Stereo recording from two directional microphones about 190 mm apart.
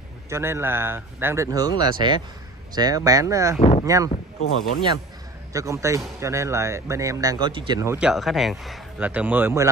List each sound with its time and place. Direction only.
0.3 s speech: 15° right (ahead or behind)
3.5 s speech: 35° left (ahead or behind)
3.8 s speech: 15° right (ahead or behind)
4.5 s speech: 90° left
5.5 s speech: 15° right (ahead or behind)
8.1 s speech: centre (ahead or behind)